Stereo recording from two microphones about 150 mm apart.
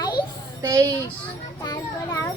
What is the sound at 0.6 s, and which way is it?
Speech, 20° right (ahead or behind).